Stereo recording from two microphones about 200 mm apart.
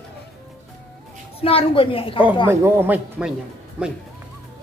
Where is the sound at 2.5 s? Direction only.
10° right (ahead or behind).